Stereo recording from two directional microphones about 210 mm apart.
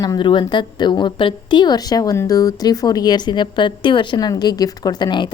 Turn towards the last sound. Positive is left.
turn(degrees=20)  # may be behind; listen again after turning